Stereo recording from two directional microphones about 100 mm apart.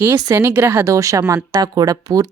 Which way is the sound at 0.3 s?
25° right (ahead or behind).